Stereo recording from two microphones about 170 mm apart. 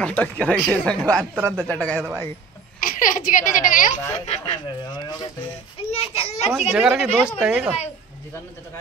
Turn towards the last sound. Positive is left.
turn(degrees=-5)  # may be behind; listen again after turning